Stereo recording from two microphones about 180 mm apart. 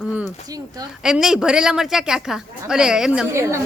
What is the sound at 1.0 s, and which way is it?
A woman's voice, 5° right (ahead or behind).